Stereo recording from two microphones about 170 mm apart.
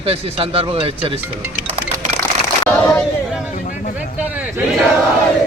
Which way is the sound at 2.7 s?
5° left (ahead or behind).